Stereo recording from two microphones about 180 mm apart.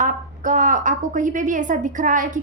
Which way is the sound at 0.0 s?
45° right (ahead or behind).